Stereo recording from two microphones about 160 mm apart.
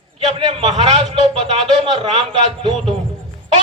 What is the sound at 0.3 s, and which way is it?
A man's voice, 35° right (ahead or behind).